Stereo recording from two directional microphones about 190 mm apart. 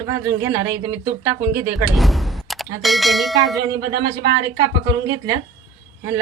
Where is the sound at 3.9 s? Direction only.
65° right (ahead or behind).